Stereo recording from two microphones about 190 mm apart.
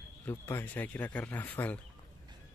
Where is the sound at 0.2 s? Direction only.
10° left (ahead or behind).